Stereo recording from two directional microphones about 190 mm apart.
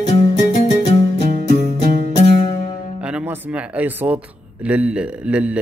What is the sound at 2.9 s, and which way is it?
Speech, 5° right (ahead or behind).